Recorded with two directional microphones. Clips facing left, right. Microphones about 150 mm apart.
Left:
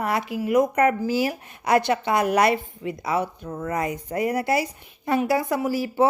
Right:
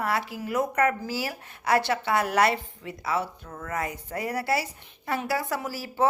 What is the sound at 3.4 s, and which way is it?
Speech, 30° left (ahead or behind).